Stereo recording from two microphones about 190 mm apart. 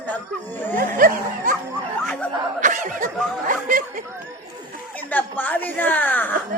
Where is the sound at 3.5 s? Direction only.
45° right (ahead or behind).